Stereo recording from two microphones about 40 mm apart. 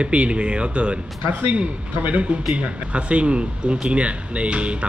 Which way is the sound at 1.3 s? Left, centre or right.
Right.